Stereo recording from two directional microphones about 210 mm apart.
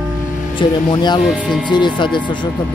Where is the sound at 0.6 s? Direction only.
20° left (ahead or behind).